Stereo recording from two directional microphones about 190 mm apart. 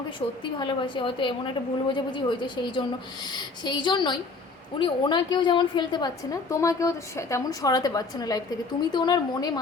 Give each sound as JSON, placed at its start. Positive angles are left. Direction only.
{"t": 0.2, "sound": "a woman's voice", "side_deg": 30}